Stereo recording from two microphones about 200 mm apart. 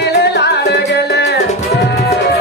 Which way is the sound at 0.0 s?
55° left (ahead or behind).